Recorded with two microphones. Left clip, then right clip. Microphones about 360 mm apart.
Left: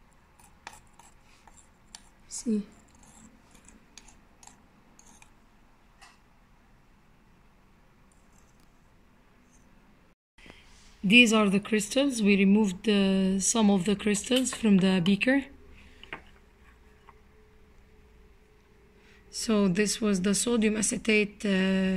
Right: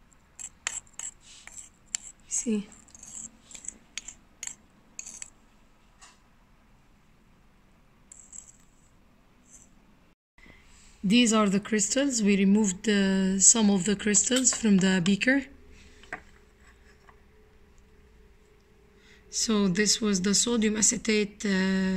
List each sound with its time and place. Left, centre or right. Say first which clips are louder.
4.0 s a sound: right 13 dB; right
11.1 s speech: left 4 dB; centre
19.0 s speech: right 2 dB; centre